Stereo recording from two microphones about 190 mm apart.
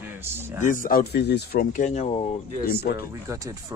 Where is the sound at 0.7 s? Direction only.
45° left (ahead or behind).